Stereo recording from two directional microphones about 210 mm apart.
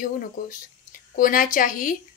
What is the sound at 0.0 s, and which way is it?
A woman's voice, 40° left (ahead or behind).